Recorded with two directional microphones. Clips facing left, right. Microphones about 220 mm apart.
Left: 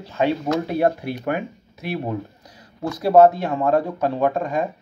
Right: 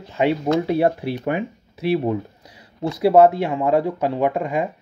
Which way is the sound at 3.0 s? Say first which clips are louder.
Even; 10° right (ahead or behind).